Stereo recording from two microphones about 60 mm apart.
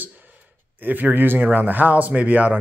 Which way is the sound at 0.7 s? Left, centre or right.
Right.